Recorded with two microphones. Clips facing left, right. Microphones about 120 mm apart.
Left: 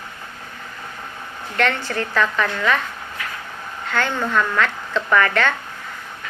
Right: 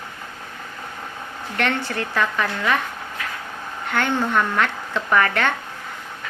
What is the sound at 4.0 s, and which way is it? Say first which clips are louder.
A woman's voice: even; 20° right (ahead or behind).